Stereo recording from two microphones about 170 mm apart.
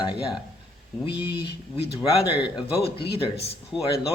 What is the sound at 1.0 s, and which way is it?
Speech, 30° left (ahead or behind).